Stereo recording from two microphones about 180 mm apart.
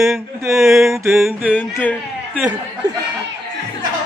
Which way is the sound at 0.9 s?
15° right (ahead or behind).